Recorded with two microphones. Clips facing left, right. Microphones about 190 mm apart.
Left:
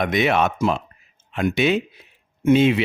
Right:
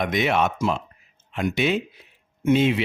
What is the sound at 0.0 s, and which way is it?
Speech, 65° left (ahead or behind).